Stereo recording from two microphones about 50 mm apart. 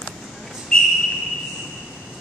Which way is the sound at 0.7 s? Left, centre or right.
Centre.